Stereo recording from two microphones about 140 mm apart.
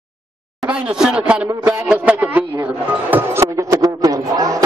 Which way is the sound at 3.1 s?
15° right (ahead or behind).